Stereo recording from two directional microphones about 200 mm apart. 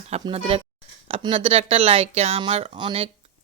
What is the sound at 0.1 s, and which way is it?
Speech, 30° right (ahead or behind).